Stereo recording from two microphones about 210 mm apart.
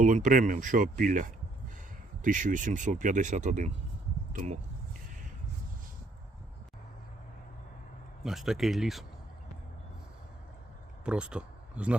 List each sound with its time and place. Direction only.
0.0 s speech: 40° right (ahead or behind)
8.2 s speech: centre (ahead or behind)
11.0 s speech: 5° right (ahead or behind)